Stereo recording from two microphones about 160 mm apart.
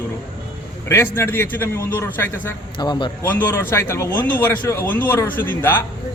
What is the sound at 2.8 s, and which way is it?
Speech, 30° left (ahead or behind).